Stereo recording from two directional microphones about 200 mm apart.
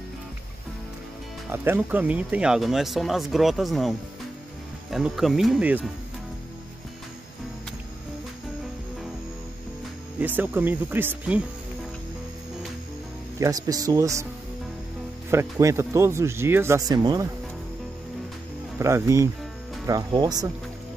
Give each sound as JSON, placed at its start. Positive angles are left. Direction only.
{"t": 1.5, "sound": "speech", "side_deg": -10}
{"t": 4.9, "sound": "speech", "side_deg": 0}
{"t": 10.1, "sound": "speech", "side_deg": -10}
{"t": 13.4, "sound": "speech", "side_deg": -20}
{"t": 15.3, "sound": "speech", "side_deg": -15}
{"t": 18.8, "sound": "speech", "side_deg": -15}